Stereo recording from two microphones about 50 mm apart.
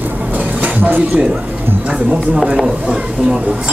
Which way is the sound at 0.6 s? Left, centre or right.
Right.